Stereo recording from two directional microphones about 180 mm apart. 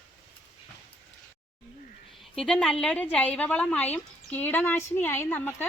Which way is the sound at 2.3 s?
Centre (ahead or behind).